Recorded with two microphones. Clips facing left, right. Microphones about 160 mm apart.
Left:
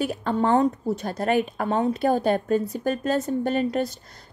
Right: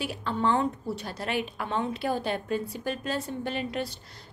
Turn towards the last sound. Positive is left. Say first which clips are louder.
# left 8 dB
turn(degrees=45)  # may be behind; listen again after turning